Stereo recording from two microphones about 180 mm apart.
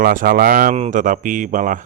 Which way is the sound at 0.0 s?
55° right (ahead or behind).